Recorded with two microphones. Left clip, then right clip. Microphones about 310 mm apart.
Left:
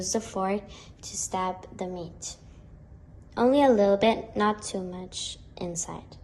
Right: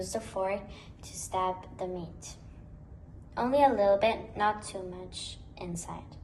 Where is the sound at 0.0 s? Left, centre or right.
Left.